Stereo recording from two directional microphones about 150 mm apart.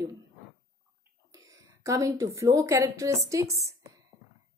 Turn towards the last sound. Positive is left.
turn(degrees=-20)  # may be behind; listen again after turning